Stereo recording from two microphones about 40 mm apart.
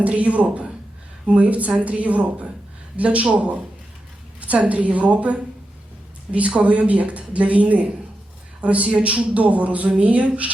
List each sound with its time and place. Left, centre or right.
0.0 s speech: right